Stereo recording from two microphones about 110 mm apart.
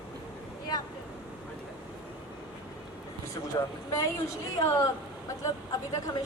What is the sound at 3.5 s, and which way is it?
A woman's voice, 35° left (ahead or behind).